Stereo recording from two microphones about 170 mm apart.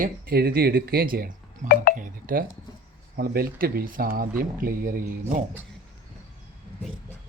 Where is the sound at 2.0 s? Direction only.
55° right (ahead or behind).